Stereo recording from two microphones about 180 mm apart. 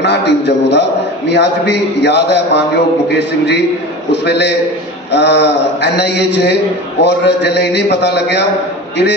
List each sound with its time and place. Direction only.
0.0 s a man's voice: 75° left (ahead or behind)